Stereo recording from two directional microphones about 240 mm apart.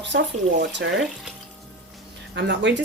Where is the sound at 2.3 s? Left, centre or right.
Right.